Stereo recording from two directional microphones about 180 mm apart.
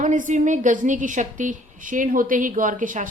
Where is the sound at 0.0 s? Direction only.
45° right (ahead or behind).